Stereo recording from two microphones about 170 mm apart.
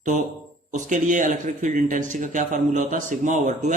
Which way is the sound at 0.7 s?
50° right (ahead or behind).